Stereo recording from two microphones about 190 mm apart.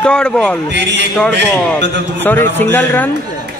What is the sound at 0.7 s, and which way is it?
Speech, 70° right (ahead or behind).